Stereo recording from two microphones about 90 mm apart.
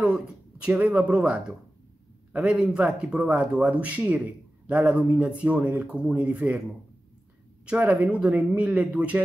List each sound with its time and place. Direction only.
0.0 s speech: 10° right (ahead or behind)
7.6 s speech: 15° right (ahead or behind)